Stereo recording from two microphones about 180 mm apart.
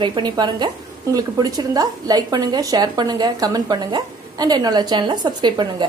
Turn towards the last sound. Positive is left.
turn(degrees=-25)  # may be behind; listen again after turning